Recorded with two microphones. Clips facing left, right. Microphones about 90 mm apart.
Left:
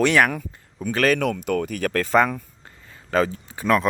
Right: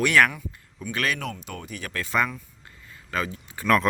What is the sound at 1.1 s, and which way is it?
Speech, 70° left (ahead or behind).